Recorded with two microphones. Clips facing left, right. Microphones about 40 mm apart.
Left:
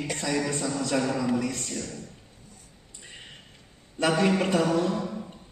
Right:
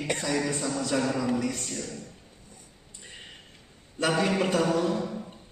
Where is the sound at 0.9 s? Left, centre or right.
Centre.